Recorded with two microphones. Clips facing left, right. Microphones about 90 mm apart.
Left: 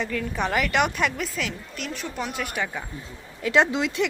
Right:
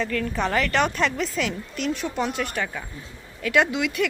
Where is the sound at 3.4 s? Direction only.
25° left (ahead or behind).